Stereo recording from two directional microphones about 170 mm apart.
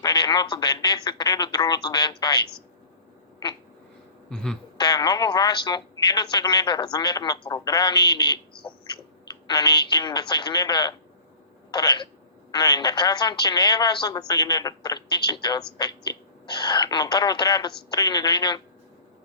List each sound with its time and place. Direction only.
0.0 s a woman's voice: 25° left (ahead or behind)
4.3 s speech: 5° left (ahead or behind)
4.8 s a woman's voice: 25° left (ahead or behind)